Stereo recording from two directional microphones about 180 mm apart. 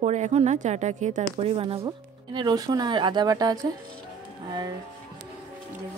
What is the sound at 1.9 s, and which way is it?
Speech, 20° right (ahead or behind).